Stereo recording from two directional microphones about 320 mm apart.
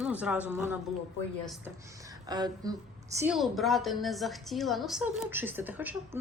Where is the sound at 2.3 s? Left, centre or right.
Centre.